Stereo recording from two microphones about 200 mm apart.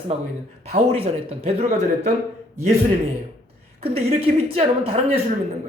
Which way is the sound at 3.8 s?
30° right (ahead or behind).